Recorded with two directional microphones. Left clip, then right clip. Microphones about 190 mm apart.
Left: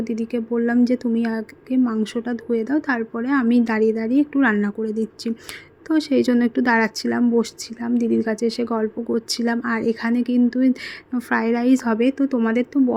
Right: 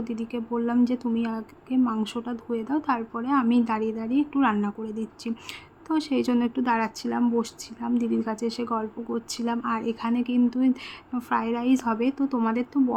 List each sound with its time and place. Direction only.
0.0 s speech: 20° left (ahead or behind)